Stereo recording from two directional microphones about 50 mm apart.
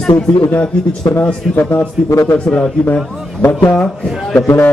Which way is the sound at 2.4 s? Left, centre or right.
Centre.